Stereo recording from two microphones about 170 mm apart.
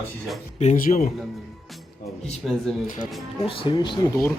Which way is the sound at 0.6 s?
45° left (ahead or behind).